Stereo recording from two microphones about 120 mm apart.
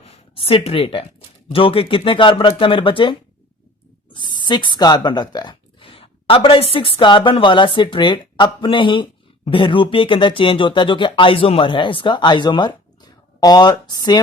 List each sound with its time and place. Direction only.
0.0 s speech: 55° left (ahead or behind); by 14.2 s 35° left (ahead or behind)